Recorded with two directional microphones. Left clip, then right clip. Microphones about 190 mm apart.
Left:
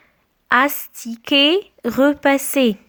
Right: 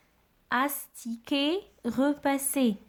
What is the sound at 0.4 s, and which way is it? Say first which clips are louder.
A woman's voice: left 13 dB; 30° left (ahead or behind).